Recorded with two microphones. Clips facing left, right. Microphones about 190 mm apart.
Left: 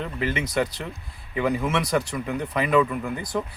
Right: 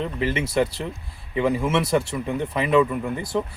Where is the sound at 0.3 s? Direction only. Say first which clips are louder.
Right 3 dB; 30° right (ahead or behind).